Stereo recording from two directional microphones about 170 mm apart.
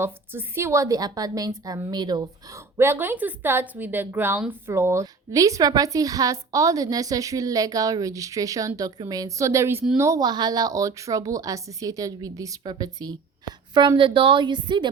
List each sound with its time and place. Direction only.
0.0 s a woman's voice: 15° right (ahead or behind)